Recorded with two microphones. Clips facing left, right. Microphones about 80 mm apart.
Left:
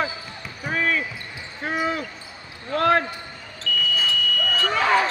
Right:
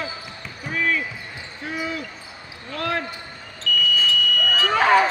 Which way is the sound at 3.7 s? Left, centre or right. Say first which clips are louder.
Right 2 dB; left.